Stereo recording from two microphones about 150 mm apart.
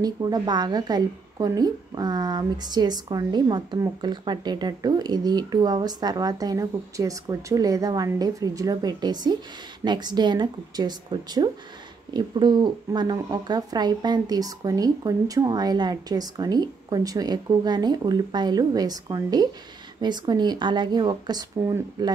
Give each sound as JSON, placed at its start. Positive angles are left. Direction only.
{"t": 0.0, "sound": "a woman's voice", "side_deg": -25}